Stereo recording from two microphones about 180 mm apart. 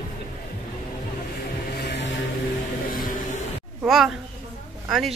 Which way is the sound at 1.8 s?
75° left (ahead or behind).